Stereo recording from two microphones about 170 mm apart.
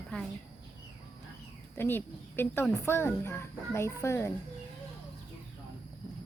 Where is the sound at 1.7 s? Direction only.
10° left (ahead or behind).